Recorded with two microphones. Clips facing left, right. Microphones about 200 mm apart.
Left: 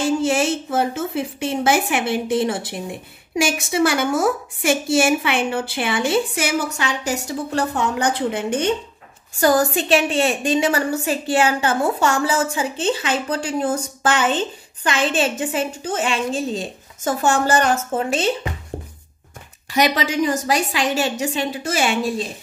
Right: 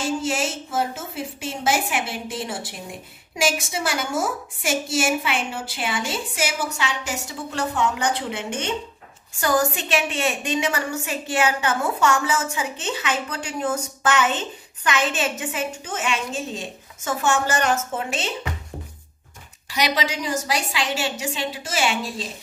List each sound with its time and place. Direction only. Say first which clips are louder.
0.2 s a woman's voice: left 6 dB; 60° left (ahead or behind)
7.1 s a woman's voice: left 7 dB; 40° left (ahead or behind)
19.7 s a woman's voice: left 5 dB; 50° left (ahead or behind)